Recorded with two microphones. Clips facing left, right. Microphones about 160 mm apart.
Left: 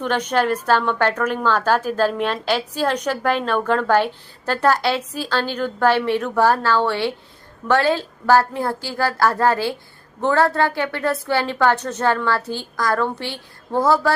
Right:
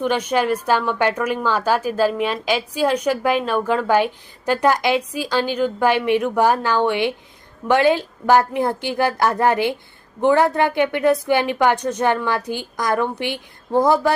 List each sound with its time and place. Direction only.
0.0 s a woman's voice: 10° right (ahead or behind)